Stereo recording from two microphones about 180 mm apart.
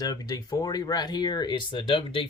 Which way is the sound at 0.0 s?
20° left (ahead or behind).